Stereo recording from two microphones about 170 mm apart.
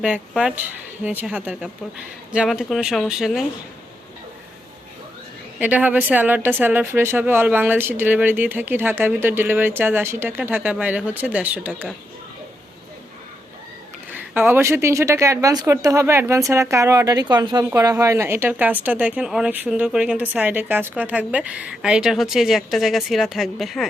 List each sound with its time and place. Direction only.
0.0 s speech: 5° right (ahead or behind)
5.5 s speech: 10° right (ahead or behind)
14.1 s speech: 10° right (ahead or behind)